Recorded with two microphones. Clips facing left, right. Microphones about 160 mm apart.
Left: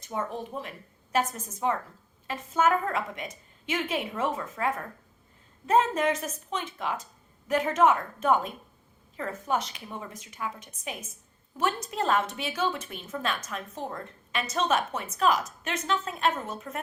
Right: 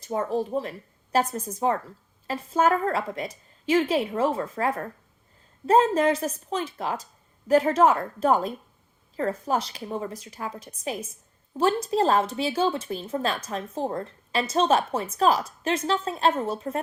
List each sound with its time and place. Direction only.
0.0 s a woman's voice: 35° right (ahead or behind)